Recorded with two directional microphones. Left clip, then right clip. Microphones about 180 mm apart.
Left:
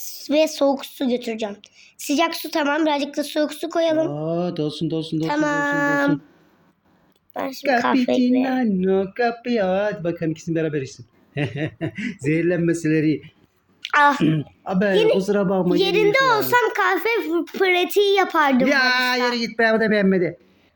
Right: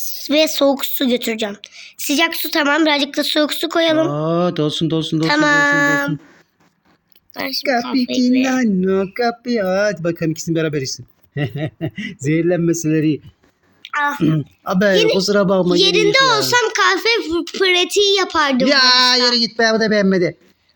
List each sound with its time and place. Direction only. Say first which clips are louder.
0.0 s speech: right 3 dB; 5° right (ahead or behind)
4.1 s speech: right 7 dB; 35° right (ahead or behind)
5.2 s speech: right 8 dB; 10° right (ahead or behind)
7.3 s a woman's voice: right 5 dB; centre (ahead or behind)
8.4 s speech: right 3 dB; 30° right (ahead or behind)
10.0 s speech: right 4 dB; 45° right (ahead or behind)
10.2 s speech: right 4 dB; 25° right (ahead or behind)
13.8 s a child's voice: left 3 dB; 20° left (ahead or behind)
14.3 s speech: right 4 dB; 30° right (ahead or behind)
14.9 s a woman's voice: right 1 dB; 5° left (ahead or behind)
15.2 s speech: right 5 dB; 25° right (ahead or behind)
15.8 s a woman's voice: right 3 dB; 10° left (ahead or behind)
18.6 s speech: right 6 dB; 25° right (ahead or behind)